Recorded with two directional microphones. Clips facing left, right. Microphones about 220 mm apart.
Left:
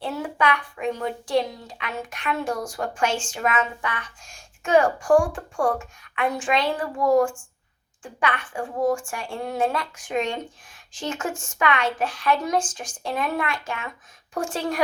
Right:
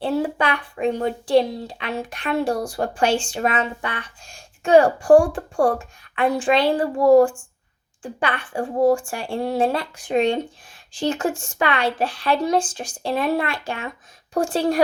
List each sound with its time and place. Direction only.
0.0 s a woman's voice: 30° right (ahead or behind)